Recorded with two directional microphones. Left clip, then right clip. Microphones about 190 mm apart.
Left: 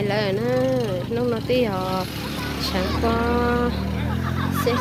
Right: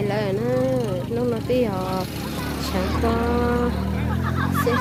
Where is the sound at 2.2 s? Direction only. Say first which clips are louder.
Even; 50° right (ahead or behind).